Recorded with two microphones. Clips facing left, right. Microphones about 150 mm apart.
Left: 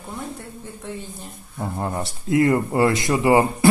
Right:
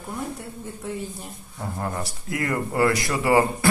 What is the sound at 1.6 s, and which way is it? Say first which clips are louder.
Speech: left 3 dB; 25° left (ahead or behind).